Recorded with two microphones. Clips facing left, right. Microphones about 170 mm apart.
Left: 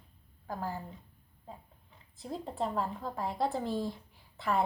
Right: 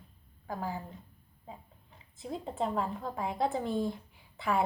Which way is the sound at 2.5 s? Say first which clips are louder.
Right 1 dB; 15° right (ahead or behind).